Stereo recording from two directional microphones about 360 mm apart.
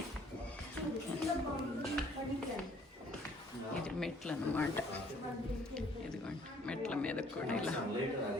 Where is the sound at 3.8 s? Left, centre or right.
Centre.